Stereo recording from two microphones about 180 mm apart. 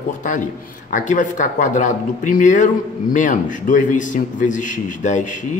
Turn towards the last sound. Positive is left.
turn(degrees=45)  # may be behind; listen again after turning